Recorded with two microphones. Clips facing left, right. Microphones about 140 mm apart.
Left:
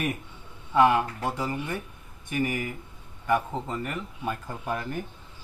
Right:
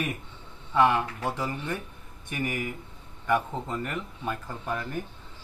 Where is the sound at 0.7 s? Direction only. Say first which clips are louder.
Left 2 dB; 15° left (ahead or behind).